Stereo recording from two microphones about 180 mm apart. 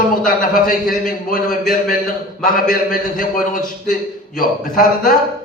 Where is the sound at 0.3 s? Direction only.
50° left (ahead or behind).